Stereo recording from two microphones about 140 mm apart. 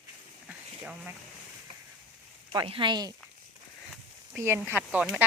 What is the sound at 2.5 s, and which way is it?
Speech, 35° right (ahead or behind).